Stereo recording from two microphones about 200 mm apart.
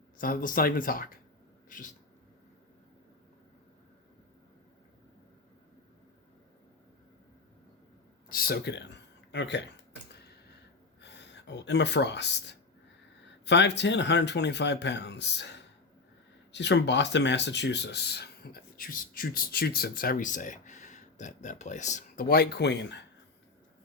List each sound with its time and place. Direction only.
0.2 s speech: 45° left (ahead or behind)
8.3 s a sound: 50° left (ahead or behind)
10.1 s tick-tock: 55° left (ahead or behind)
11.0 s speech: 60° left (ahead or behind)